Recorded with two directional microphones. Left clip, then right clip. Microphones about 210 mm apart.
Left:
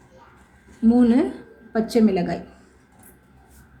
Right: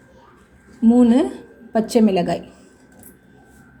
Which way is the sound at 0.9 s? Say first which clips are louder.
Right 3 dB; 15° right (ahead or behind).